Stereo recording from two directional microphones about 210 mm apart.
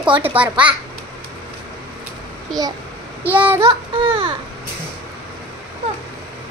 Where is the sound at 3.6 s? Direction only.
20° right (ahead or behind).